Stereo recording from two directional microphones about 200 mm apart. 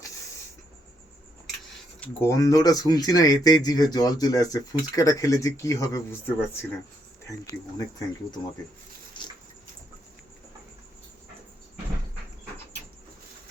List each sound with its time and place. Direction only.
2.0 s speech: 15° left (ahead or behind)